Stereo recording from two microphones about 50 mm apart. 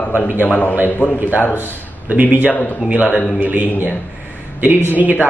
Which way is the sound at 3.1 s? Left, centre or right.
Centre.